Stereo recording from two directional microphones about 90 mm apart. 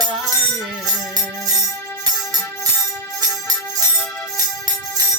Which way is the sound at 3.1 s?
45° right (ahead or behind).